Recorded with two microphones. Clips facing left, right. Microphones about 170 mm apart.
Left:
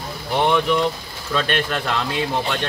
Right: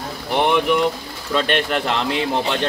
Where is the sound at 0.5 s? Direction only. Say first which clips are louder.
Right 1 dB; 15° right (ahead or behind).